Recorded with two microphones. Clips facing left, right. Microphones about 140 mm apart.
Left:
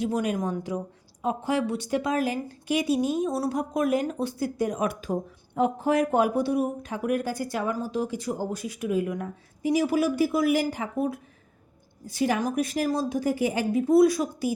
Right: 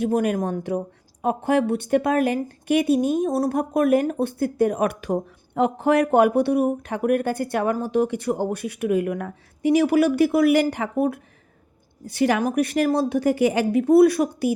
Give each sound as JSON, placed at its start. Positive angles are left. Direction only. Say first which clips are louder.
{"t": 0.0, "sound": "a woman's voice", "louder": "right 5 dB", "side_deg": -55}